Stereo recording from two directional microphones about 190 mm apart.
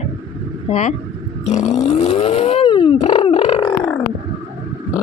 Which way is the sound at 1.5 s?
35° left (ahead or behind).